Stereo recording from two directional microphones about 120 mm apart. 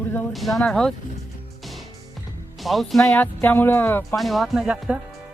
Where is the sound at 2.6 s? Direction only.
Centre (ahead or behind); by 4.0 s 20° left (ahead or behind).